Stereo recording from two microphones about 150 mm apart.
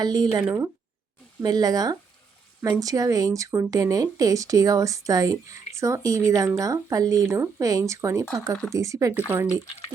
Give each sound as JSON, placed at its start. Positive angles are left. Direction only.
{"t": 0.0, "sound": "speech", "side_deg": -25}